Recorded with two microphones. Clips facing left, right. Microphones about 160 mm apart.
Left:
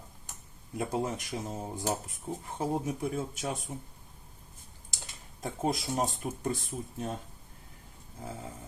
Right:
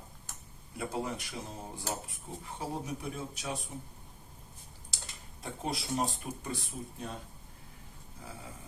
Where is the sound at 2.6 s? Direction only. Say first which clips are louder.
Left 6 dB; 50° left (ahead or behind).